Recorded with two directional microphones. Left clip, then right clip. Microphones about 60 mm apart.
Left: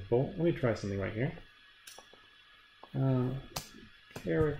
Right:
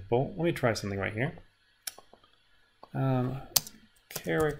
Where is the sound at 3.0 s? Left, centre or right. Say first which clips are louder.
Right 3 dB; right.